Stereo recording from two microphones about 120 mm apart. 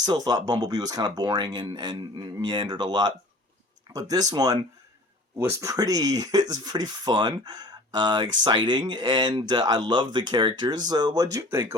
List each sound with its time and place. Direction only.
0.0 s speech: 35° right (ahead or behind)